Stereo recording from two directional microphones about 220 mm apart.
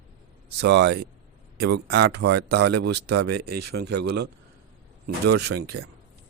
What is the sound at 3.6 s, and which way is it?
Speech, 50° right (ahead or behind).